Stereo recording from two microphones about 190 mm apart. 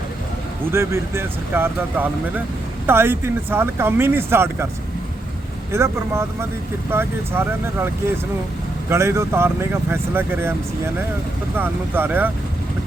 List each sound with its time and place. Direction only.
0.7 s speech: 15° right (ahead or behind)
5.7 s speech: 15° right (ahead or behind)
8.9 s speech: 15° right (ahead or behind)